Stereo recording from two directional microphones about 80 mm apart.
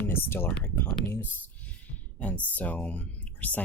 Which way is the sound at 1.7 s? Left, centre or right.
Centre.